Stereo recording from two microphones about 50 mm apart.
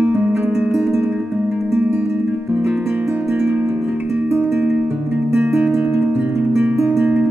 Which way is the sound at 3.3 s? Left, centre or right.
Centre.